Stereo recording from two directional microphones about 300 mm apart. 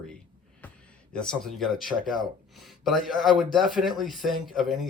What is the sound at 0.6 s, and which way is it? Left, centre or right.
Music, centre.